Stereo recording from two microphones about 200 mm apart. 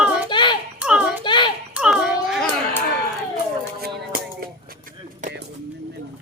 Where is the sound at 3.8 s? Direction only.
50° right (ahead or behind).